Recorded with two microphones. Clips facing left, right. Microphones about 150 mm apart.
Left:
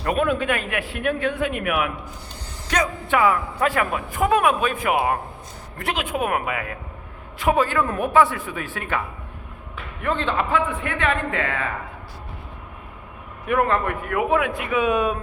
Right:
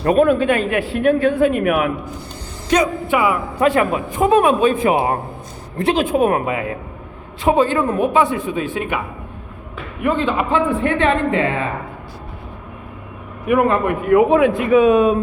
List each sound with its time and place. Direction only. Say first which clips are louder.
0.0 s speech: right 8 dB; 35° right (ahead or behind)
2.7 s a man's voice: right 5 dB; 20° right (ahead or behind)
10.0 s a man's voice: right 5 dB; 10° right (ahead or behind)
10.4 s a man's voice: right 6 dB; 30° right (ahead or behind)
13.5 s a man's voice: right 5 dB; 15° right (ahead or behind)